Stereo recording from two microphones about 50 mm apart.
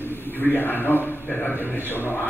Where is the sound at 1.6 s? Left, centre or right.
Left.